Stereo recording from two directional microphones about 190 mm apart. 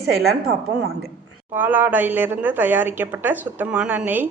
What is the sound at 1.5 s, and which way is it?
Speech, 10° right (ahead or behind).